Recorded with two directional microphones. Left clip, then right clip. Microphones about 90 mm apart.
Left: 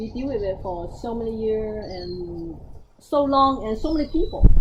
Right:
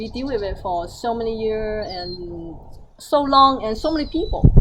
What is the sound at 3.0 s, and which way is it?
Speech, 10° right (ahead or behind).